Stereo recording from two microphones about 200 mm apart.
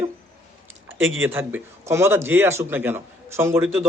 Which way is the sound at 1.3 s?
10° right (ahead or behind).